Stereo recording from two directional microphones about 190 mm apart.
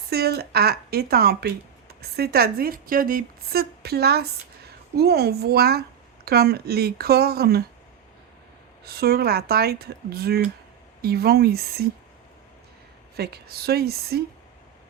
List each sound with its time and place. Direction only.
0.1 s speech: 55° right (ahead or behind)
8.8 s speech: 55° right (ahead or behind)
13.1 s speech: 55° right (ahead or behind)